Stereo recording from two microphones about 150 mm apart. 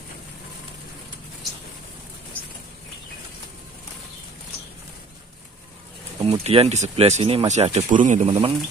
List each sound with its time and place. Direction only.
6.2 s speech: 40° right (ahead or behind)
8.3 s speech: 35° right (ahead or behind)